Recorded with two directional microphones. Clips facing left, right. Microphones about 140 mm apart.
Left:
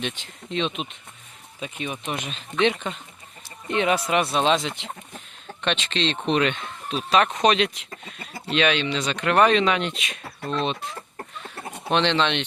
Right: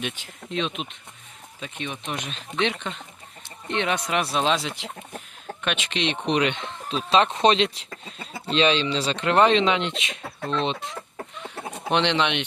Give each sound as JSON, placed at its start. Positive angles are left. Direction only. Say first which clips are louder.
{"t": 0.0, "sound": "speech", "louder": "left 1 dB", "side_deg": -5}
{"t": 11.4, "sound": "chicken", "louder": "even", "side_deg": -20}